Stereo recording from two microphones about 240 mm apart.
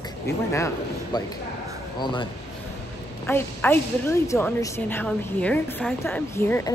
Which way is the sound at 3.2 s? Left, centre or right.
Centre.